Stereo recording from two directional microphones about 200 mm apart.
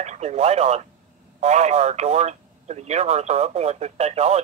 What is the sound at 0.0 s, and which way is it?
Speech, 35° right (ahead or behind).